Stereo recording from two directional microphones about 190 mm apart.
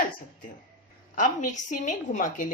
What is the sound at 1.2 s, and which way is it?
Speech, 45° left (ahead or behind).